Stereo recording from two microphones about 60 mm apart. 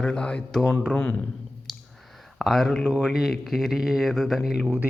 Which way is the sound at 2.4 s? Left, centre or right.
Centre.